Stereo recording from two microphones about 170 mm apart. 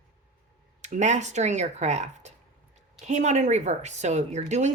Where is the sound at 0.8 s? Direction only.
45° right (ahead or behind).